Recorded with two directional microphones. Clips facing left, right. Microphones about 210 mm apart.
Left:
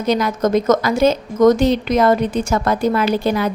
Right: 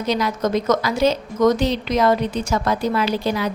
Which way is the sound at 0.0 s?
50° left (ahead or behind).